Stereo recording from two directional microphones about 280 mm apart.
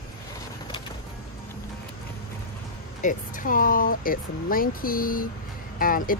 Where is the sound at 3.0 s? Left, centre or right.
Left.